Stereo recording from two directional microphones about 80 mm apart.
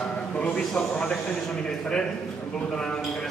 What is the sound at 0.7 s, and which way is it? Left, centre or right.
Speech, centre.